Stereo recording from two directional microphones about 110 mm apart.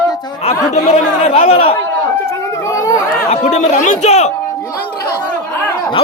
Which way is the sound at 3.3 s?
90° left.